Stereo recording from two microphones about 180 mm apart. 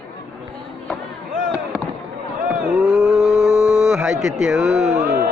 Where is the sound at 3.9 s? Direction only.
5° right (ahead or behind).